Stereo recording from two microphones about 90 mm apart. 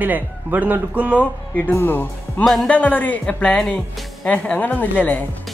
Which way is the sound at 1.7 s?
20° left (ahead or behind).